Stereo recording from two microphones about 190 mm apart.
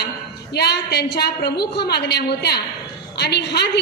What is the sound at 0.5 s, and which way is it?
A woman's voice, 60° left (ahead or behind).